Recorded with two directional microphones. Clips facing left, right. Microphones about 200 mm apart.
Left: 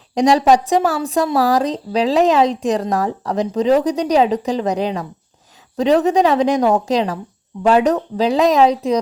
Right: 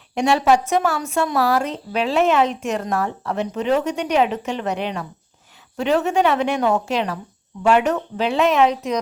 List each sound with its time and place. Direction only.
0.2 s a woman's voice: 35° left (ahead or behind)